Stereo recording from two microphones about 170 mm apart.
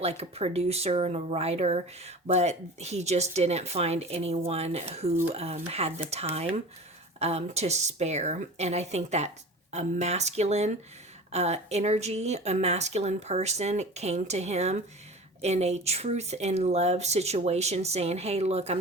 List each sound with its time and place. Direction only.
0.0 s speech: 35° right (ahead or behind)